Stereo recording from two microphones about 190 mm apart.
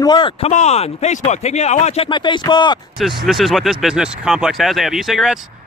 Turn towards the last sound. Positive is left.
turn(degrees=0)  # may be behind; listen again after turning